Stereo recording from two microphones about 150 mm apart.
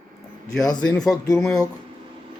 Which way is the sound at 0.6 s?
25° left (ahead or behind).